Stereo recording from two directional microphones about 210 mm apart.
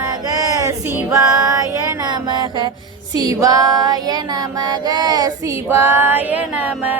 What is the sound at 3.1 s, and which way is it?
Child singing, 15° right (ahead or behind).